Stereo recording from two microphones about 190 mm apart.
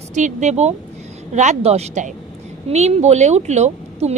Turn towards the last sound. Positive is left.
turn(degrees=-35)  # may be behind; listen again after turning